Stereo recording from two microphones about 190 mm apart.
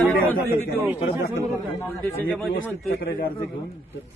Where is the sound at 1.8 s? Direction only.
10° left (ahead or behind).